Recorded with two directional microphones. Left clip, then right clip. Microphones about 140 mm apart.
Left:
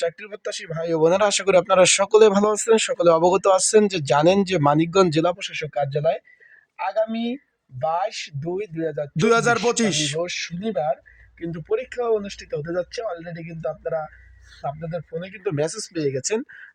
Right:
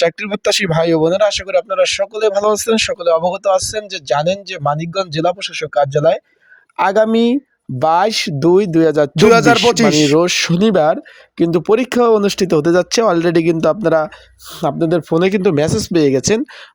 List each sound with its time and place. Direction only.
0.0 s speech: 50° right (ahead or behind); by 0.9 s 80° right
0.9 s speech: 35° right (ahead or behind)
1.1 s speech: 15° right (ahead or behind)
2.4 s speech: 30° right (ahead or behind)
3.0 s speech: 15° right (ahead or behind)
5.1 s speech: 30° right (ahead or behind)
5.4 s speech: 50° right (ahead or behind)
10.2 s speech: 55° right (ahead or behind)
11.3 s speech: 45° right (ahead or behind); by 15.3 s 85° right
15.3 s speech: 30° right (ahead or behind)